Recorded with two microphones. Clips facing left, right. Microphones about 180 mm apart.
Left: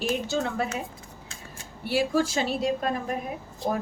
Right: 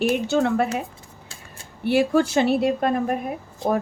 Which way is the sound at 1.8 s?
60° right (ahead or behind).